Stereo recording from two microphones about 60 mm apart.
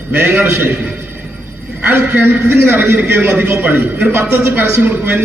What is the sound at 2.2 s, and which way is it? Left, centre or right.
A man's voice, right.